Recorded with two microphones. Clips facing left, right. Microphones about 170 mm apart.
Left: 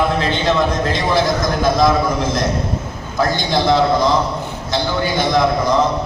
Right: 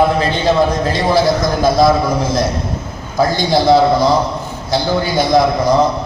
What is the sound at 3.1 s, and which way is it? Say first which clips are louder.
A man's voice: right 4 dB; 35° right (ahead or behind).